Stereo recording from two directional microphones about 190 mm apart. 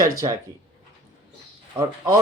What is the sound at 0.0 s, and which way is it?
Speech, 15° right (ahead or behind).